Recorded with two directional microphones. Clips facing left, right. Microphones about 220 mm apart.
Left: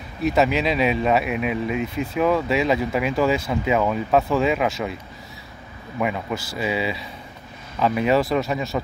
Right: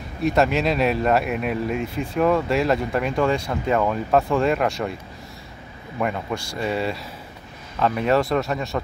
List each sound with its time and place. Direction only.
0.2 s speech: centre (ahead or behind)
5.9 s speech: 5° left (ahead or behind)